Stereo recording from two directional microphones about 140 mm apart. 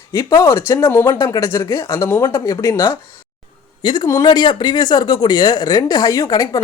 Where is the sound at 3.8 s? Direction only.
35° left (ahead or behind).